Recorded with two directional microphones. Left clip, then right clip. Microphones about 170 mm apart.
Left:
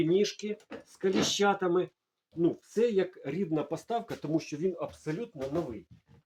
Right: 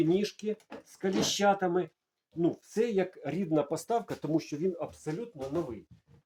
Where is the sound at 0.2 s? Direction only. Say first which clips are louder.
Left 3 dB; 50° right (ahead or behind).